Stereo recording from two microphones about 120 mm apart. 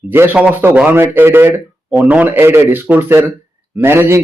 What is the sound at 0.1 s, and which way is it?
A man's voice, 15° right (ahead or behind).